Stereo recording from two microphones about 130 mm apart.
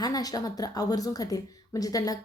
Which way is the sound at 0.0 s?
30° left (ahead or behind).